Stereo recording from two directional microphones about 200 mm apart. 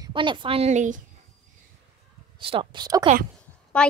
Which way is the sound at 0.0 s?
25° right (ahead or behind).